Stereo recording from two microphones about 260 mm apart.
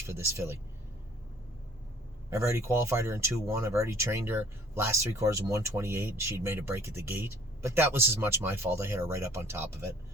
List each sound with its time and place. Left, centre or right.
0.0 s speech: centre
2.3 s speech: centre